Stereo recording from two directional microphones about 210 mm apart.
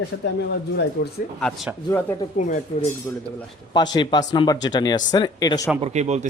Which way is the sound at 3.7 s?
20° left (ahead or behind).